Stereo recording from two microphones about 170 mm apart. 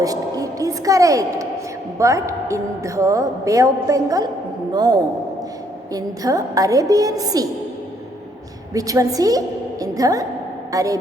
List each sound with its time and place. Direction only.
0.0 s a woman's voice: 20° right (ahead or behind)
8.7 s a woman's voice: 20° right (ahead or behind)